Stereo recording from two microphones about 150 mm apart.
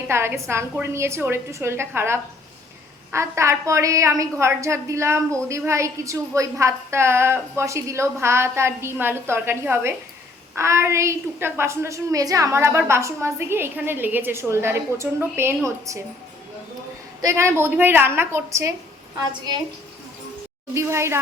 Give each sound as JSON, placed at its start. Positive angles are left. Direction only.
{"t": 0.1, "sound": "a woman's voice", "side_deg": -15}
{"t": 17.2, "sound": "a woman's voice", "side_deg": -20}
{"t": 20.7, "sound": "a woman's voice", "side_deg": -15}